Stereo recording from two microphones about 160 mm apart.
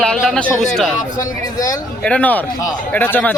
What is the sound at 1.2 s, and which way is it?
Speech, 20° left (ahead or behind).